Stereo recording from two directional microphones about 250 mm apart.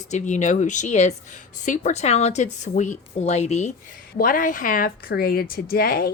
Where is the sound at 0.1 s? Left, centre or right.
Left.